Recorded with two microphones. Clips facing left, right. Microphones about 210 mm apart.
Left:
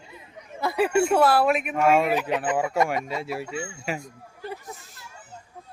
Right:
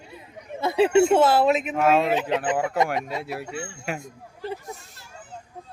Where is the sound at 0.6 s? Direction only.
25° right (ahead or behind).